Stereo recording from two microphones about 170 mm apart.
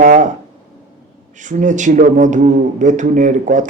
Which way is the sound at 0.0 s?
50° right (ahead or behind).